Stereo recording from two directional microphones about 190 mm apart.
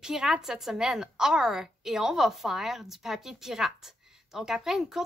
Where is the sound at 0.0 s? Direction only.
5° right (ahead or behind).